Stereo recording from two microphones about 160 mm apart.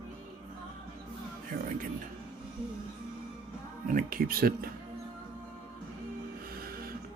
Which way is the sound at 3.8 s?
60° right (ahead or behind).